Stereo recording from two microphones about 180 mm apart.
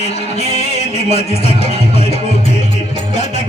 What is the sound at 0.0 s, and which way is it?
Music, 35° left (ahead or behind).